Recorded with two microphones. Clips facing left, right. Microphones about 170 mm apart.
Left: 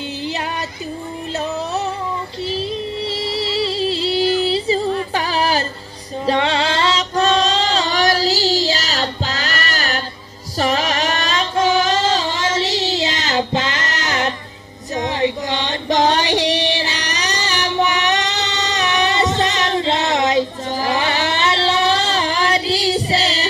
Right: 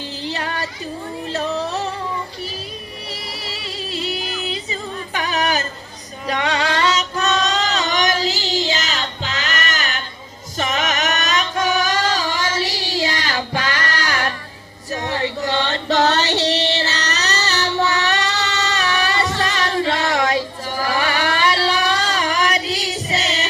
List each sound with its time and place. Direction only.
3.3 s music: 30° left (ahead or behind)
6.2 s female singing: 30° left (ahead or behind)
15.0 s music: 20° left (ahead or behind)